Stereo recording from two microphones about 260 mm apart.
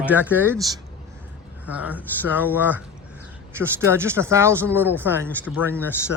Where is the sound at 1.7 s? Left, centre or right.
Centre.